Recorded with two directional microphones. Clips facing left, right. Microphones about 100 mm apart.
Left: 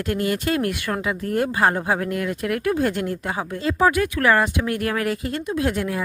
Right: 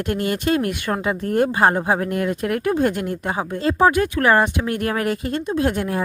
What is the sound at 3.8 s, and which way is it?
Speech, 30° right (ahead or behind).